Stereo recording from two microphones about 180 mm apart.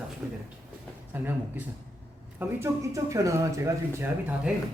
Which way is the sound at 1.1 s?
10° right (ahead or behind).